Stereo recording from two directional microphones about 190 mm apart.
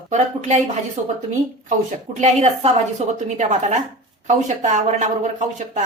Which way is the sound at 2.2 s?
35° right (ahead or behind).